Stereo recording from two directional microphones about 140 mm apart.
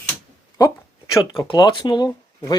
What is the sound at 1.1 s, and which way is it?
Speech, 25° left (ahead or behind).